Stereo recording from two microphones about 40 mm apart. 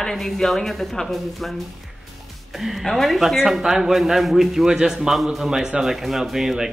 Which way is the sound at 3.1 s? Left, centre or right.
Centre.